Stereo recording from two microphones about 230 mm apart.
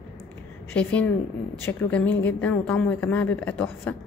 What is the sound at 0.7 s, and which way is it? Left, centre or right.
A woman's voice, centre.